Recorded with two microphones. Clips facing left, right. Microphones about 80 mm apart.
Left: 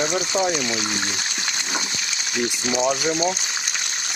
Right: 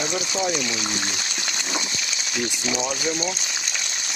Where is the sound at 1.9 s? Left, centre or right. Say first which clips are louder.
Left 2 dB; left.